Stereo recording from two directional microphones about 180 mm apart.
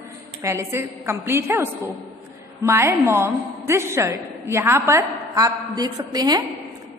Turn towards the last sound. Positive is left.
turn(degrees=-20)  # may be behind; listen again after turning